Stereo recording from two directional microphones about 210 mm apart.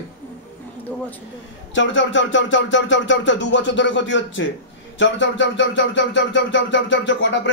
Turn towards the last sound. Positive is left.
turn(degrees=60)  # may be behind; listen again after turning